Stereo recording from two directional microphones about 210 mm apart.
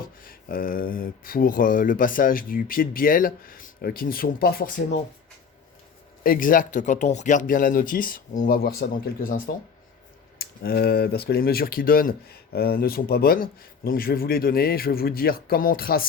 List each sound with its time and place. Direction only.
0.2 s speech: 45° left (ahead or behind)
6.2 s speech: 40° left (ahead or behind)